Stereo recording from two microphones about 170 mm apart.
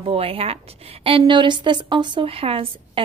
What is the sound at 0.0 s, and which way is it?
A woman's voice, 35° right (ahead or behind).